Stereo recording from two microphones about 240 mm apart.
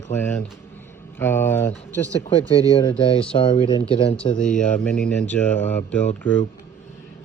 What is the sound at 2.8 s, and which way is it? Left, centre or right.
Speech, left.